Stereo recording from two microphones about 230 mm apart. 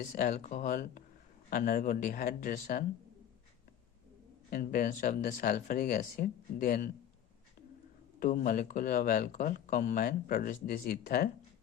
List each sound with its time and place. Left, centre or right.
0.0 s speech: left
4.4 s speech: left
8.2 s speech: left